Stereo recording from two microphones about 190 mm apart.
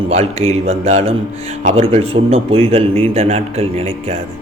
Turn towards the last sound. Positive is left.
turn(degrees=-30)  # may be behind; listen again after turning